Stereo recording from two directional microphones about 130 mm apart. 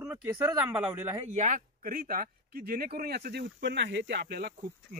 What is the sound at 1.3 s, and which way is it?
Speech, 75° right (ahead or behind).